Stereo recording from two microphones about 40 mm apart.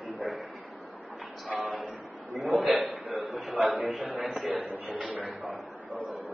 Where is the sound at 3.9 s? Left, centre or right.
Right.